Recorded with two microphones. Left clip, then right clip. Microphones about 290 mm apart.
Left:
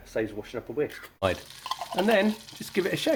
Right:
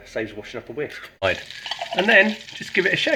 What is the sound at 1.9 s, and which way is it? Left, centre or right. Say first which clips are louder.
Speech: right 8 dB; left.